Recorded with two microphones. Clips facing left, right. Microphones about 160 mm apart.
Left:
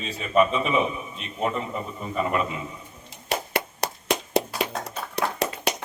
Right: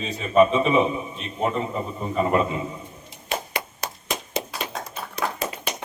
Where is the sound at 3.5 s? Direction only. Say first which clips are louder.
Left 4 dB; 70° left (ahead or behind).